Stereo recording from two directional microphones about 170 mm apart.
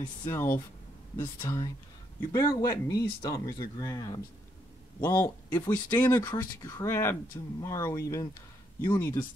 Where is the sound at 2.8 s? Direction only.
20° left (ahead or behind).